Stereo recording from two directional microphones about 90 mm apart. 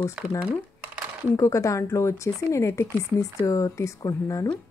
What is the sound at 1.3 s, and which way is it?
A woman's voice, 35° left (ahead or behind).